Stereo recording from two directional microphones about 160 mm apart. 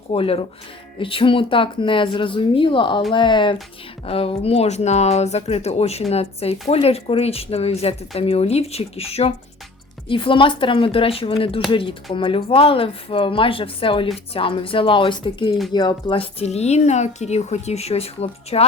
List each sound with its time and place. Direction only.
0.1 s speech: 35° left (ahead or behind)